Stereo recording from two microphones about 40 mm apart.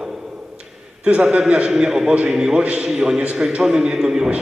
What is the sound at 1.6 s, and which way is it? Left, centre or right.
A man's voice, centre.